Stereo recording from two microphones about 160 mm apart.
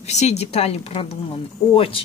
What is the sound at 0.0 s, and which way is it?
A woman's voice, 45° left (ahead or behind).